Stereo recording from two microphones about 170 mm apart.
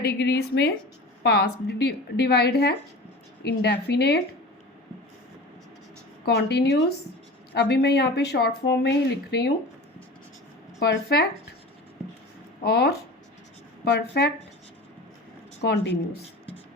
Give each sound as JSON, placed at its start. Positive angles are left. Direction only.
{"t": 0.0, "sound": "a woman's voice", "side_deg": 75}
{"t": 6.2, "sound": "a woman's voice", "side_deg": 75}
{"t": 10.8, "sound": "a woman's voice", "side_deg": 75}
{"t": 12.6, "sound": "a woman's voice", "side_deg": 70}
{"t": 15.6, "sound": "speech", "side_deg": 80}